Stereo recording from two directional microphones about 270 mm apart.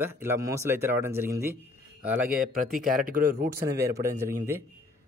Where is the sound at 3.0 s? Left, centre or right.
Right.